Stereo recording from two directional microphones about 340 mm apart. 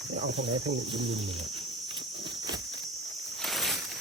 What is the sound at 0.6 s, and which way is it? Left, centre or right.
Speech, centre.